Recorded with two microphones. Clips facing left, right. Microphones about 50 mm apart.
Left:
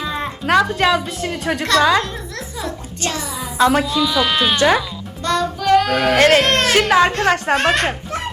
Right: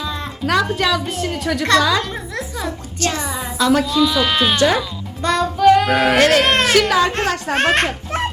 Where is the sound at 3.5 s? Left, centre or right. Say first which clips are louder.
Left 1 dB; left.